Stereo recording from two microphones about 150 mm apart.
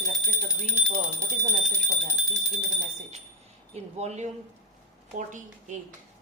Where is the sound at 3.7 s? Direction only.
50° right (ahead or behind).